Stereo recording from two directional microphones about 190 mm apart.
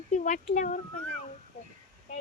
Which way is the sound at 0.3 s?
40° left (ahead or behind).